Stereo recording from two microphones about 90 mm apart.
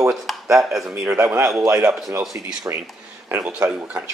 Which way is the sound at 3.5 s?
15° right (ahead or behind).